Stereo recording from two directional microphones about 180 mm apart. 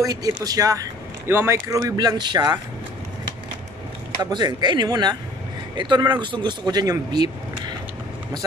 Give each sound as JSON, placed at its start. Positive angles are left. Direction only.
{"t": 0.0, "sound": "speech", "side_deg": -20}
{"t": 4.2, "sound": "speech", "side_deg": -25}